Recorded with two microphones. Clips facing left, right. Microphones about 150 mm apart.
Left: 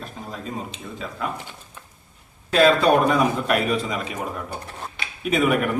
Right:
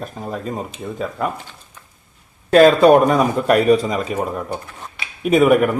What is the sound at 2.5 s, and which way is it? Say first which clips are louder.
A man's voice: right 7 dB; 45° right (ahead or behind).